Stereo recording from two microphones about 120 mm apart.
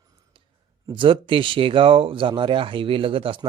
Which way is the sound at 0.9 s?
45° right (ahead or behind).